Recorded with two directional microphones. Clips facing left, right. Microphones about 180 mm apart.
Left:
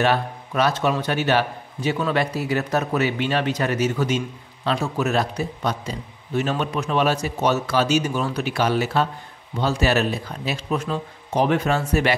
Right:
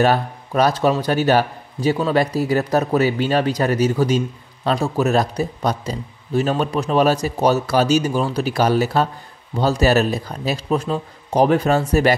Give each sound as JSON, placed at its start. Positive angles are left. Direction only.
{"t": 0.0, "sound": "a man's voice", "side_deg": -40}